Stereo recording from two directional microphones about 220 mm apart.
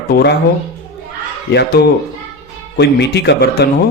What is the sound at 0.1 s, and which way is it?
Speech, 50° left (ahead or behind).